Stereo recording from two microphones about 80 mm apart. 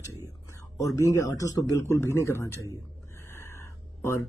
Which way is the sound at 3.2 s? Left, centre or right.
Left.